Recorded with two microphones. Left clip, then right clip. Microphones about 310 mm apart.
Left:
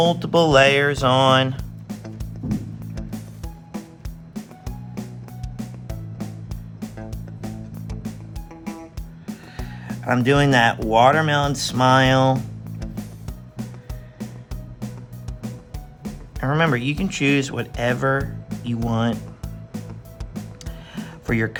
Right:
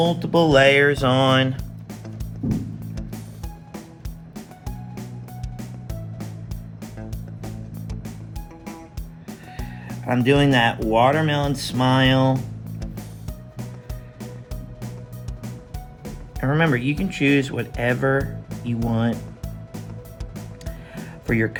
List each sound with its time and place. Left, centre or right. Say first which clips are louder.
0.0 s speech: left 2 dB; centre
1.5 s music: left 2 dB; centre
4.4 s music: left 1 dB; centre
10.0 s speech: even; centre
12.3 s music: left 2 dB; centre
16.0 s speech: even; centre
20.3 s music: left 2 dB; centre
20.9 s music: right 1 dB; centre